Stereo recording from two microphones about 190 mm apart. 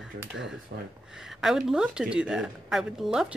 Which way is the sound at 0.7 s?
60° right (ahead or behind).